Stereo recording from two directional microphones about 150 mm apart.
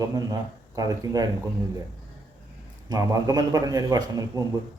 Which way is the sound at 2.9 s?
25° right (ahead or behind).